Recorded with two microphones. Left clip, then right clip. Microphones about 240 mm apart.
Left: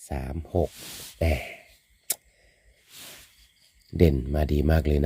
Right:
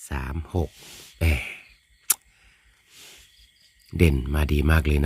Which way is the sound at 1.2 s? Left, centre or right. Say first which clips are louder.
Even; centre.